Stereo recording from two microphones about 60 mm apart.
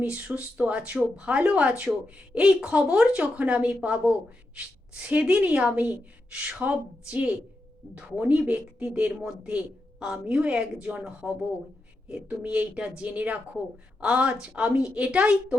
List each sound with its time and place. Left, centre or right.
0.3 s speech: centre